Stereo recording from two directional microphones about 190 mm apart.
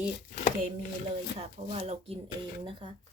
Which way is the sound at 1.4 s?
30° right (ahead or behind).